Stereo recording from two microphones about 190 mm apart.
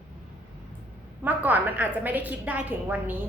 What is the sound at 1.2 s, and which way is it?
A woman's voice, 10° right (ahead or behind).